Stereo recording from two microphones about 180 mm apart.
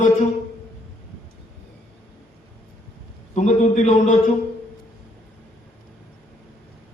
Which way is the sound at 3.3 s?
40° left (ahead or behind).